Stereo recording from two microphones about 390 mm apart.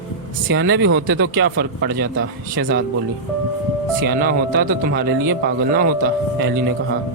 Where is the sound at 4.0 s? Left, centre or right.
Right.